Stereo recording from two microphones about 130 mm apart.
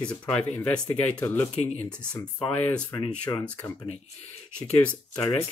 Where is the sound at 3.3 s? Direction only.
25° left (ahead or behind).